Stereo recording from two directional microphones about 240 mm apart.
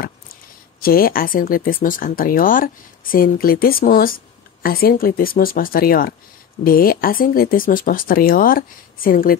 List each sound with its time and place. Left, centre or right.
0.7 s speech: left